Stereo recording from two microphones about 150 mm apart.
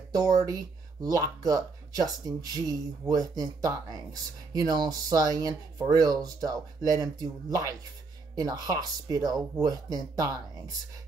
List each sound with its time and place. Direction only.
0.1 s speech: 25° right (ahead or behind)